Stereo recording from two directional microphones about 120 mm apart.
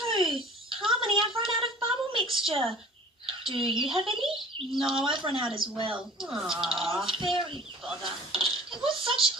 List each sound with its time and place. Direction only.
0.0 s a sound: 45° right (ahead or behind)
3.2 s speech: 45° right (ahead or behind)
4.7 s speech: 5° right (ahead or behind)
5.0 s speech: 45° right (ahead or behind)
6.0 s speech: 5° right (ahead or behind)
6.7 s speech: 45° right (ahead or behind)
8.3 s speech: 45° right (ahead or behind)